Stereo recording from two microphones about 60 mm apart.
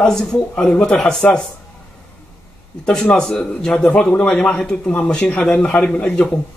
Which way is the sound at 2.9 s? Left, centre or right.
Centre.